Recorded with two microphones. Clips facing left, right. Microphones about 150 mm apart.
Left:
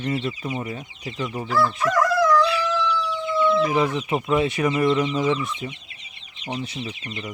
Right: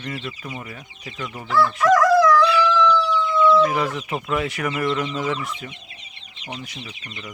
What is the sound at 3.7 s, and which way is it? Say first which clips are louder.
Speech: left 2 dB; 20° left (ahead or behind).